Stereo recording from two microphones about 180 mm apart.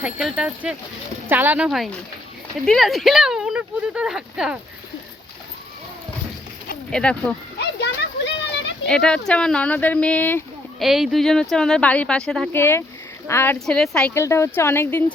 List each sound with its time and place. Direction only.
0.0 s speech: 5° right (ahead or behind)
6.9 s speech: 5° left (ahead or behind)
7.6 s children playing: 70° left (ahead or behind)
8.9 s speech: 5° left (ahead or behind)
10.8 s speech: centre (ahead or behind)